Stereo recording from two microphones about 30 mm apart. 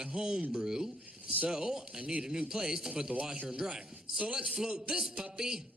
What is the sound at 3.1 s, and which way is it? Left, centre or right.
Speech, right.